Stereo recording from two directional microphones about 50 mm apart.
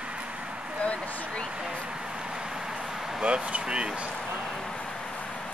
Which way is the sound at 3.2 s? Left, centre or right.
Right.